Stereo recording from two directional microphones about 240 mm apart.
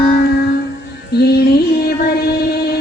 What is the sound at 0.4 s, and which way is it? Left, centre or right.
Music, left.